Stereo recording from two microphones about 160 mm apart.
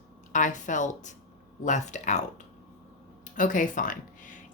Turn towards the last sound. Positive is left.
turn(degrees=55)  # may be behind; listen again after turning